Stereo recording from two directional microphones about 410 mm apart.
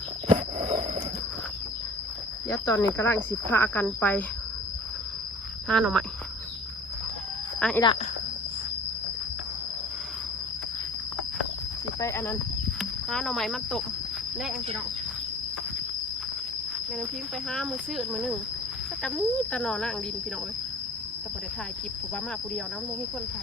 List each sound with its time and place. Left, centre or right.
0.3 s a sound: centre
2.5 s speech: centre
5.6 s speech: centre
7.6 s speech: centre
11.9 s speech: centre
17.5 s speech: centre